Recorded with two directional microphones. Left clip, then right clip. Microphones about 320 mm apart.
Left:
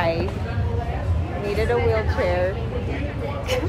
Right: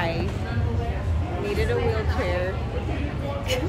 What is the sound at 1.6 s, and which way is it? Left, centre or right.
Speech, centre.